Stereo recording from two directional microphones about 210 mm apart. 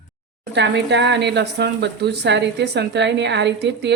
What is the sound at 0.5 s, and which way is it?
Speech, 55° right (ahead or behind).